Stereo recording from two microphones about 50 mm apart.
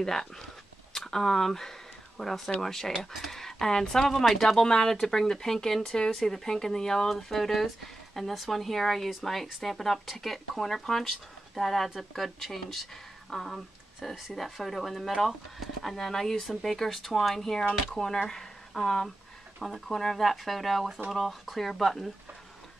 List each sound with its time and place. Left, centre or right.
0.0 s speech: centre